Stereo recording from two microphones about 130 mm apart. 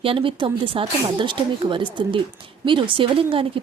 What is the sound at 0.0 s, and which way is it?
Speech, 40° right (ahead or behind).